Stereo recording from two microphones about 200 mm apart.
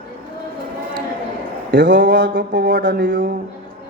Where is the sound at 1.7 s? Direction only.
45° right (ahead or behind).